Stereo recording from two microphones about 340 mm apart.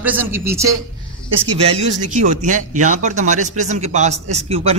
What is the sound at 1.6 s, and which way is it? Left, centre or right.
Speech, centre.